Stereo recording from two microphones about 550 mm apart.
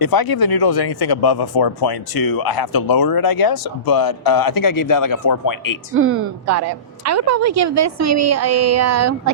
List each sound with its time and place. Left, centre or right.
0.0 s speech: left
5.9 s a woman's voice: right